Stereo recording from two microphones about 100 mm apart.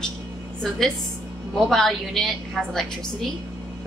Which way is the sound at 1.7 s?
5° left (ahead or behind).